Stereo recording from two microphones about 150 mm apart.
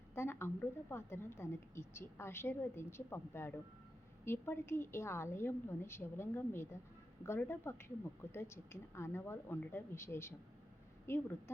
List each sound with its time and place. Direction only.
0.1 s a woman's voice: 15° left (ahead or behind)